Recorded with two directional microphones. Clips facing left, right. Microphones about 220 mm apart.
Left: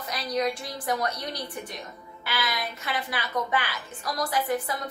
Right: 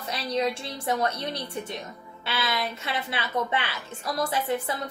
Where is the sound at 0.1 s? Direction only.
25° right (ahead or behind).